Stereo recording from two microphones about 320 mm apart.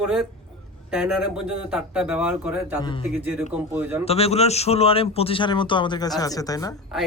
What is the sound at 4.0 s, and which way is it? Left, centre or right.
A man's voice, centre.